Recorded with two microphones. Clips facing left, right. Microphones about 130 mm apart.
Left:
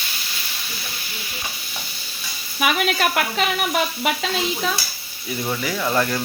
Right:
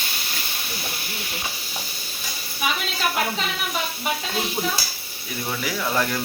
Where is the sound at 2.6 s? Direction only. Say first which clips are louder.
Left 6 dB; 70° left (ahead or behind).